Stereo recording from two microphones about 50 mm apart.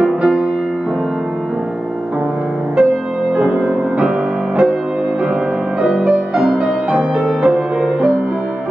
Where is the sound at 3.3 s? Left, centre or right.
Right.